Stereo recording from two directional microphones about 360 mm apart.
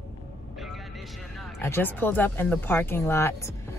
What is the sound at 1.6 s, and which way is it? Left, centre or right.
A woman's voice, centre.